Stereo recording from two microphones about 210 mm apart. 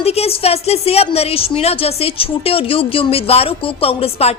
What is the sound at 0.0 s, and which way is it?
A woman's voice, 30° left (ahead or behind).